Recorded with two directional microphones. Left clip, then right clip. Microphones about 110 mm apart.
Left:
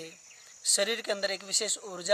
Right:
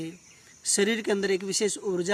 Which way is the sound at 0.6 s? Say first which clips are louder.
Right 3 dB; 35° left (ahead or behind).